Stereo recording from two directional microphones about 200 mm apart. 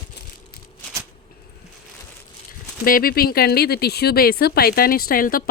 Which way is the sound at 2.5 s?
45° left (ahead or behind).